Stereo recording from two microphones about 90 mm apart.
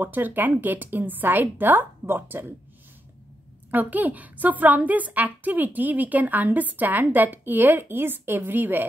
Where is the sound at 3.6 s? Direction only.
20° right (ahead or behind).